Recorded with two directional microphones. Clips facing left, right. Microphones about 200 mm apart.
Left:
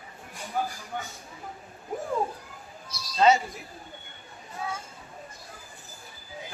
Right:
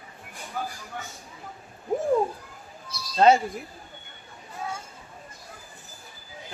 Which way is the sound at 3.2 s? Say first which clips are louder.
Right 3 dB; 55° right (ahead or behind).